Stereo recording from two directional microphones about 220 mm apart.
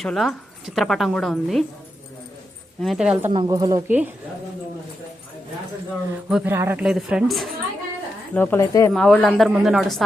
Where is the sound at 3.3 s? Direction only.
20° right (ahead or behind).